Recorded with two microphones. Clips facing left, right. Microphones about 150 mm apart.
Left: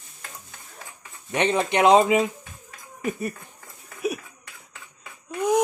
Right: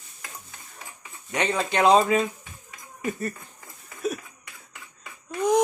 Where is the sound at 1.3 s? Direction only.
20° left (ahead or behind).